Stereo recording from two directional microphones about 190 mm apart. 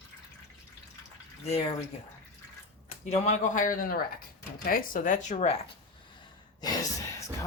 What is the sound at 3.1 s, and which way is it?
A man's voice, 40° left (ahead or behind).